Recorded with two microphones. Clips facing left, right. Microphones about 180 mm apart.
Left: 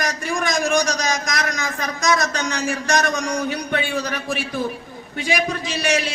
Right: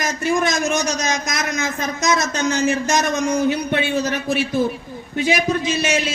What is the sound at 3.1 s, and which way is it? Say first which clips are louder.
Speech: right 4 dB; 20° right (ahead or behind).